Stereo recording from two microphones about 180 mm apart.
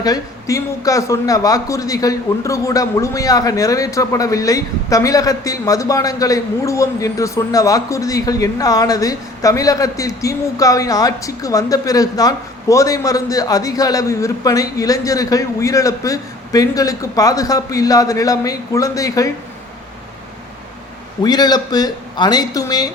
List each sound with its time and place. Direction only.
0.0 s a man's voice: 20° left (ahead or behind)
21.2 s a man's voice: 25° left (ahead or behind)